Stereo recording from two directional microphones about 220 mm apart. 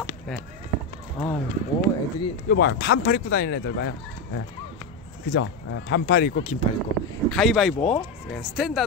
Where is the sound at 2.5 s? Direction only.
45° left (ahead or behind).